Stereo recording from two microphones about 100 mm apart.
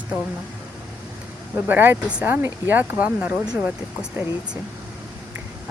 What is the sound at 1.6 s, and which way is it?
Speech, 20° right (ahead or behind).